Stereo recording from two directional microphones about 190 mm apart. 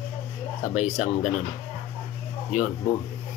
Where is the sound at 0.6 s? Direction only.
40° left (ahead or behind).